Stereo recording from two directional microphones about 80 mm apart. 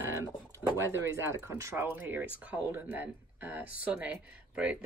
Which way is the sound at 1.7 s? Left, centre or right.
Right.